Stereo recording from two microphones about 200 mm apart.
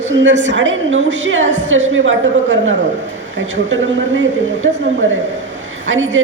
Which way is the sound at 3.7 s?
70° right (ahead or behind).